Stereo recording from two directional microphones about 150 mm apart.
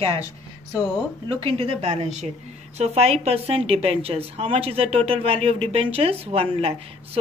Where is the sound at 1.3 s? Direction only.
40° right (ahead or behind).